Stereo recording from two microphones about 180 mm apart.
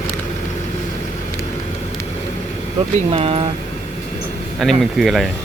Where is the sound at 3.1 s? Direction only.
30° right (ahead or behind).